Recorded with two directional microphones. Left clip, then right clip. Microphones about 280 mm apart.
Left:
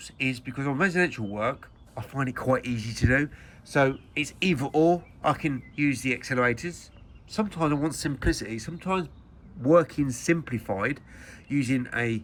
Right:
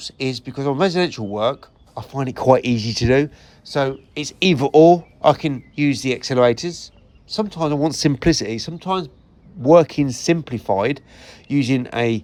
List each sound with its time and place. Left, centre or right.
0.0 s speech: centre
8.1 s speech: centre